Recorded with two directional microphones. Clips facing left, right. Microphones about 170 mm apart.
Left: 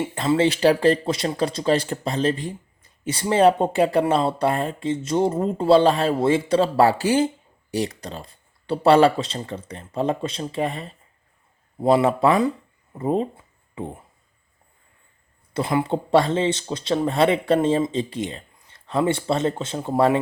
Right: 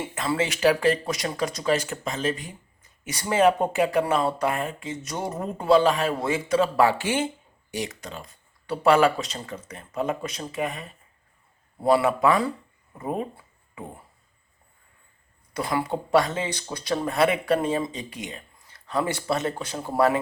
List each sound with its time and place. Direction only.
0.0 s speech: 25° left (ahead or behind)
15.5 s speech: 25° left (ahead or behind)